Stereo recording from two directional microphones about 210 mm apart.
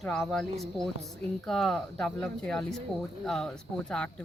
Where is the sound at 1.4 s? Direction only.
Centre (ahead or behind).